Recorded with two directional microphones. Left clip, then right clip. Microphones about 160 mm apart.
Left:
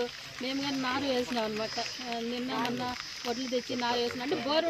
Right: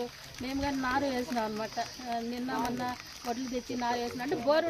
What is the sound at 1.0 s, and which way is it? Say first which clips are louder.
Speech: left 2 dB; 45° right (ahead or behind).